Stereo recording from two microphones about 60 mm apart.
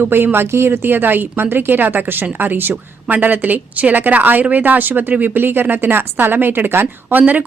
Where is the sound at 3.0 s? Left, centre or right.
Right.